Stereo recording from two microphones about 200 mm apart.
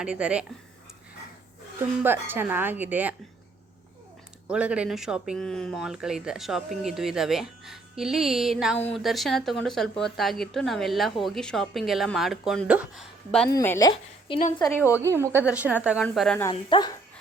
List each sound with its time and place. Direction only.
0.0 s speech: 5° right (ahead or behind)
2.0 s speech: 10° right (ahead or behind)
4.4 s speech: 5° right (ahead or behind)
13.5 s a woman's voice: 15° left (ahead or behind)
15.0 s speech: 15° right (ahead or behind); by 16.4 s 5° left (ahead or behind)
16.4 s speech: 20° left (ahead or behind)